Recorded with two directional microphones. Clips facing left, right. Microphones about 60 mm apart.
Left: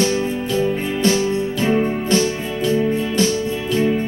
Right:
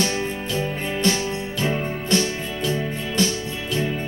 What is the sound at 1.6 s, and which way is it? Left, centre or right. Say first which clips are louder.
Music: left 6 dB; left.